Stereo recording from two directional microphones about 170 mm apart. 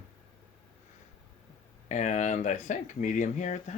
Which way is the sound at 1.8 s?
45° left (ahead or behind).